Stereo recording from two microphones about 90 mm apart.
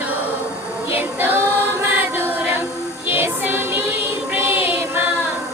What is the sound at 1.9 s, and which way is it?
Choir, 20° right (ahead or behind).